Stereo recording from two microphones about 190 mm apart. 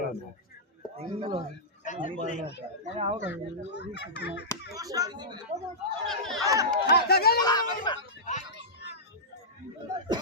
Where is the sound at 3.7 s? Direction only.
65° left (ahead or behind).